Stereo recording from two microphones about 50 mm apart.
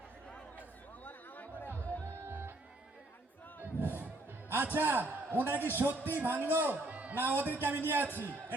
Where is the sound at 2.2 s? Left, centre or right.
Right.